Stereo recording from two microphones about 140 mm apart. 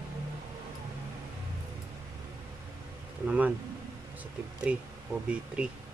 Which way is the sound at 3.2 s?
10° right (ahead or behind).